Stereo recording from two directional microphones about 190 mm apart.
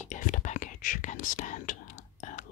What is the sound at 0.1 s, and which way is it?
Whispering, 40° left (ahead or behind).